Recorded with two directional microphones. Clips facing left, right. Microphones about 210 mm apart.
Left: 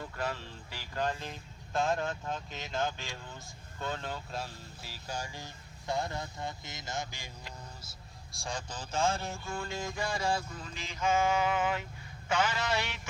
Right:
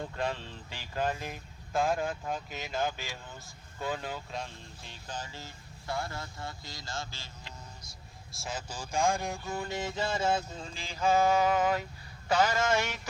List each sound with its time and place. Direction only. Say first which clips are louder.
0.0 s speech: right 3 dB; 20° right (ahead or behind)
1.7 s speech: right 2 dB; 5° right (ahead or behind); by 7.3 s 15° left (ahead or behind)
8.3 s speech: even; 5° right (ahead or behind); by 13.0 s 45° right (ahead or behind)